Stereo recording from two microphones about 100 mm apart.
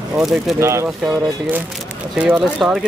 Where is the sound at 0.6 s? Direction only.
30° right (ahead or behind).